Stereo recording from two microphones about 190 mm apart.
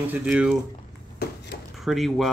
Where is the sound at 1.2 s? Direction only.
60° left (ahead or behind).